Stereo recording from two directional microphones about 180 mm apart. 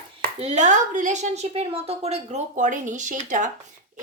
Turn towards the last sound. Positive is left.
turn(degrees=-45)  # may be behind; listen again after turning